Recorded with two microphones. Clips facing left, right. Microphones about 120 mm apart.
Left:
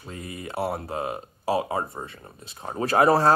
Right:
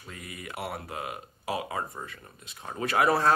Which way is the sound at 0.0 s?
30° left (ahead or behind).